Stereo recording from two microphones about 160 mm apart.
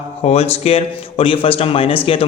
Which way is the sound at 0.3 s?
40° left (ahead or behind).